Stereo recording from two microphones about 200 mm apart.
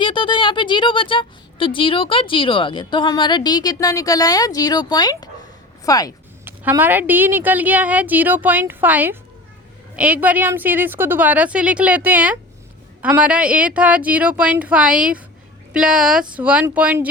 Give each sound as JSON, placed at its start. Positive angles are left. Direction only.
{"t": 0.0, "sound": "speech", "side_deg": 25}
{"t": 6.4, "sound": "a woman's voice", "side_deg": -10}